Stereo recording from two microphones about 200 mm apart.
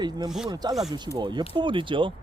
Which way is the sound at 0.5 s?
20° right (ahead or behind).